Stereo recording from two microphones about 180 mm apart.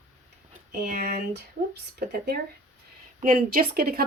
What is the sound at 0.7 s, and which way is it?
Speech, 60° right (ahead or behind).